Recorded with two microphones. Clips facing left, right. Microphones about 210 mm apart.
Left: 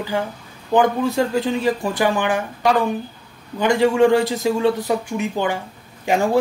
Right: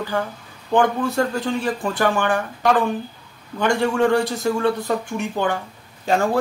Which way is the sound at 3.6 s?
15° left (ahead or behind).